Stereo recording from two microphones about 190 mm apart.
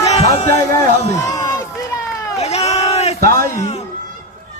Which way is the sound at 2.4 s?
35° left (ahead or behind).